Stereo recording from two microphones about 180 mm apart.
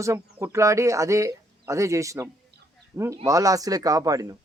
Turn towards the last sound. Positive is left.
turn(degrees=-20)  # may be behind; listen again after turning